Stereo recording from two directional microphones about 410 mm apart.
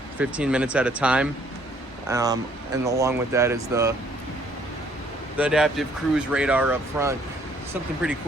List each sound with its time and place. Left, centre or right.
0.2 s speech: centre
5.4 s speech: centre